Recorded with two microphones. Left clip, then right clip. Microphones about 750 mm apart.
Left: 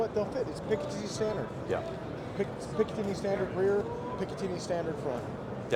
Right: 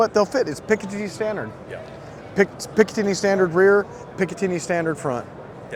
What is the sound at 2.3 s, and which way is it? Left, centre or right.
Speech, right.